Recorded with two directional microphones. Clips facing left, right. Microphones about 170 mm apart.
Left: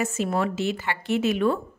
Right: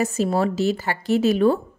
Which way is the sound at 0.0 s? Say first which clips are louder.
Right 4 dB; 35° right (ahead or behind).